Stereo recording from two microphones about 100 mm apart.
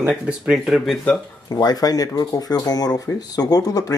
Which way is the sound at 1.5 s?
40° left (ahead or behind).